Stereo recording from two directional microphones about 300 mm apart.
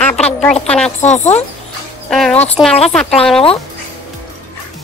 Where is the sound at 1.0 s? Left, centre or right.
Left.